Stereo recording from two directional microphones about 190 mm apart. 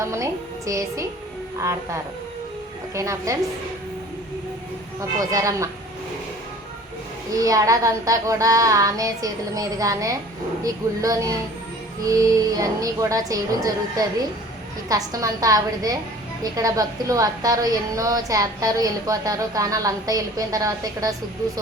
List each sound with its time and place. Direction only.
0.0 s child singing: 15° right (ahead or behind)
4.9 s child singing: 15° right (ahead or behind)
7.3 s child singing: 20° right (ahead or behind)
12.0 s a woman's voice: 15° right (ahead or behind)